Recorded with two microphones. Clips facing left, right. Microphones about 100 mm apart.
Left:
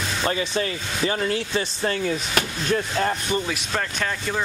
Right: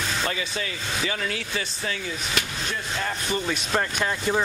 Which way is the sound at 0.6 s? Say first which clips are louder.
Left 5 dB; 40° left (ahead or behind).